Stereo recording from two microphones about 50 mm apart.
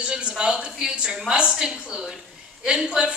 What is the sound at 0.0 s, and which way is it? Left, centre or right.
A woman's voice, centre.